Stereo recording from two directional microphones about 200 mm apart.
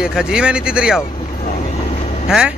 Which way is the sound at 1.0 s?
25° left (ahead or behind).